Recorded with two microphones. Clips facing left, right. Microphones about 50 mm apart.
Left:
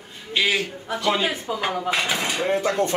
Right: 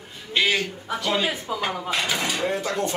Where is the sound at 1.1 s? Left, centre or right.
Left.